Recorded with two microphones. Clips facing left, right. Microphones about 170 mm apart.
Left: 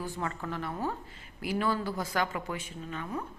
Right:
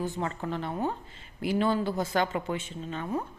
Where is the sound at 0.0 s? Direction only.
25° right (ahead or behind).